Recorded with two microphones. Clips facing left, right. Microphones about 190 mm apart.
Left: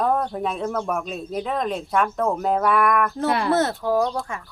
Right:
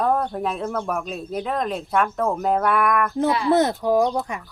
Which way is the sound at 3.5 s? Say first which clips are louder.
Right 4 dB; 15° right (ahead or behind).